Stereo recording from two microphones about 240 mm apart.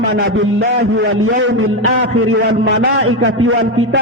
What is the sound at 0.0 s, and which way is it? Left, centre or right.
A man's voice, right.